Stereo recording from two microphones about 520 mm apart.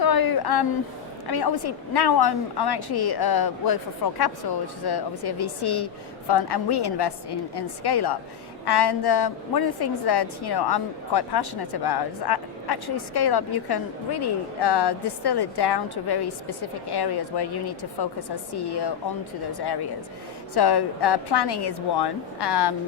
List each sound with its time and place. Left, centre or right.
0.0 s a sound: left
1.3 s a woman's voice: left
20.5 s a woman's voice: left